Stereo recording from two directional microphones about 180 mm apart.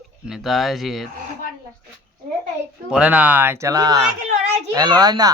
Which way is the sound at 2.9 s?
5° right (ahead or behind).